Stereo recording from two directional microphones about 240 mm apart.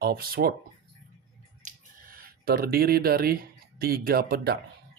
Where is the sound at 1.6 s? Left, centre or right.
Right.